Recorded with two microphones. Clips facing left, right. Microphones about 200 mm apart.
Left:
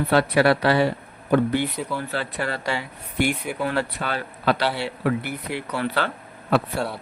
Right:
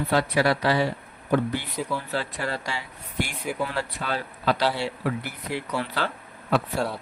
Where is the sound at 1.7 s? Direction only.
Centre (ahead or behind).